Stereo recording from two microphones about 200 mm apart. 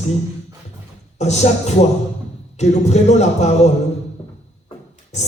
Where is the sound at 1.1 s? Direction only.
35° left (ahead or behind).